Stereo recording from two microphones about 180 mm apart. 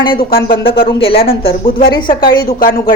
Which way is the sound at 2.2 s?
55° left (ahead or behind).